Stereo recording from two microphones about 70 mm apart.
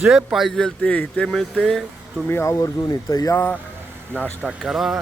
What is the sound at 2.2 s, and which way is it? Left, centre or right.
Speech, left.